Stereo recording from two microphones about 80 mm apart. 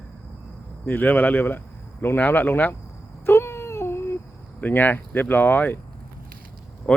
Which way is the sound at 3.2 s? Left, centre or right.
Left.